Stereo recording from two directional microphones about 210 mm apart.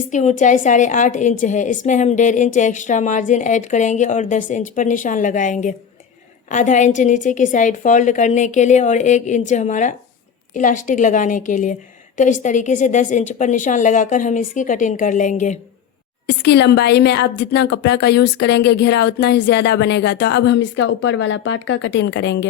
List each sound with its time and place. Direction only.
0.1 s a woman's voice: 35° left (ahead or behind)
16.2 s speech: 55° left (ahead or behind)